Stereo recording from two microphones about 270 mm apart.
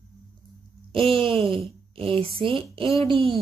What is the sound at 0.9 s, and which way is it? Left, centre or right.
A woman's voice, right.